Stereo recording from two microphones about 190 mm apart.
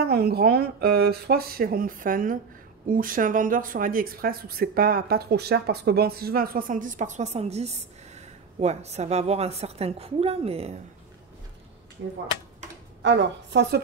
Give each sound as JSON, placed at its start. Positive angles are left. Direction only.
{"t": 0.0, "sound": "a woman's voice", "side_deg": -55}
{"t": 13.0, "sound": "a woman's voice", "side_deg": -70}